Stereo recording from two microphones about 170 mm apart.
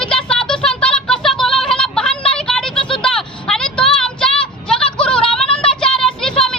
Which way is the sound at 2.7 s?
30° left (ahead or behind).